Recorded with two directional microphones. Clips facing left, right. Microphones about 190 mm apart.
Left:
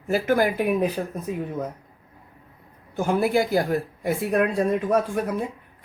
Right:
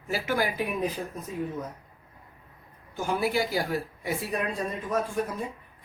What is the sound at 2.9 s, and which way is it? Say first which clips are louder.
Speech: left 6 dB; 55° left (ahead or behind).